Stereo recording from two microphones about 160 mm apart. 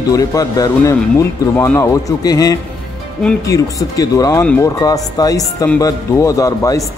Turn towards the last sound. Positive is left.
turn(degrees=20)  # may be behind; listen again after turning